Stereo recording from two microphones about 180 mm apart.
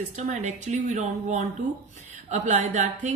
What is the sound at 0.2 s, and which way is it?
A woman's voice, 40° right (ahead or behind).